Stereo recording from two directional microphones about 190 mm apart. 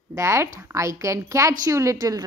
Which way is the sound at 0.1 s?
15° right (ahead or behind).